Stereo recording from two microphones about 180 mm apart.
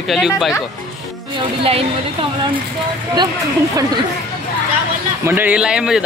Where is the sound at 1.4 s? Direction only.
30° right (ahead or behind).